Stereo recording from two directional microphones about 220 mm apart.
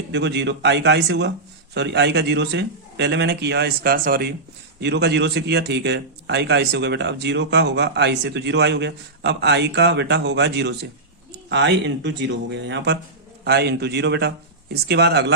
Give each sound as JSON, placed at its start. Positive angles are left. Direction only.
{"t": 0.1, "sound": "a man's voice", "side_deg": -50}